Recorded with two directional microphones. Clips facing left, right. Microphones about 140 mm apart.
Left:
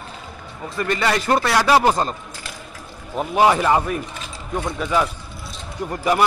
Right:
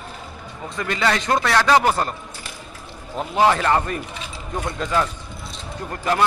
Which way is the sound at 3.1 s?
15° left (ahead or behind).